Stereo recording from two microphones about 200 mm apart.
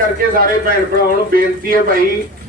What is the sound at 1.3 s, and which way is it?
Speech, 45° right (ahead or behind).